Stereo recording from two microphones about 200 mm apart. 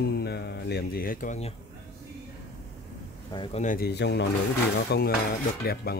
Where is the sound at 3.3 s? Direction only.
25° left (ahead or behind).